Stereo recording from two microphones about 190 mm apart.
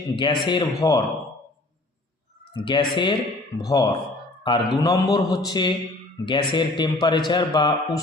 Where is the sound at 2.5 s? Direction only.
25° left (ahead or behind).